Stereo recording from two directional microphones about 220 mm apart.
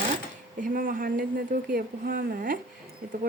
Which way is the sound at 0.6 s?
40° right (ahead or behind).